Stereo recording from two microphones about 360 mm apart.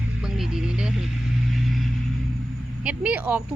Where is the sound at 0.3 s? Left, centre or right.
Centre.